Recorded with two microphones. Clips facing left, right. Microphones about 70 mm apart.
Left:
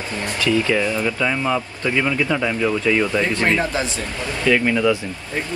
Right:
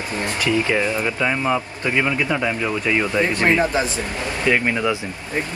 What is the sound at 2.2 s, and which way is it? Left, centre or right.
Speech, centre.